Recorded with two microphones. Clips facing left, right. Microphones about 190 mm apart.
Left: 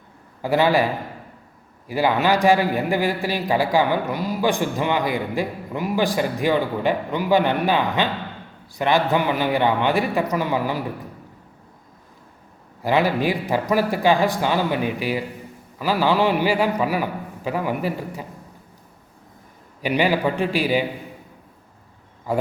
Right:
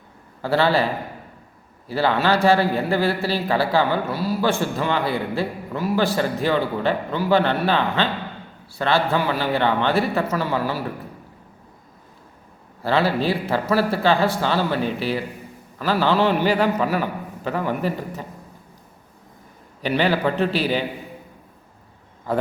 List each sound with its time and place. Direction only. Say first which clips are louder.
0.4 s a man's voice: left 1 dB; 15° left (ahead or behind)
1.9 s a man's voice: even; 15° left (ahead or behind)
12.8 s a man's voice: left 1 dB; 15° left (ahead or behind)
19.8 s a man's voice: even; 10° left (ahead or behind)
22.3 s a man's voice: even; 10° left (ahead or behind)